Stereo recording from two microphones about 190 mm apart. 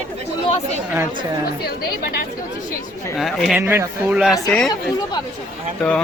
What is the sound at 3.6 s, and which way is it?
Speech, 10° right (ahead or behind).